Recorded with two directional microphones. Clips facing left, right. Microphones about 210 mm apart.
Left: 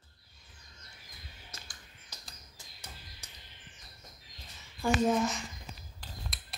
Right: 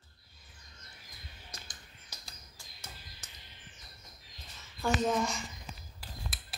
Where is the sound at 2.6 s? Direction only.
20° left (ahead or behind).